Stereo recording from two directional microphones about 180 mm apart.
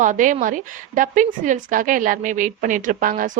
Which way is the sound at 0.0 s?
45° right (ahead or behind).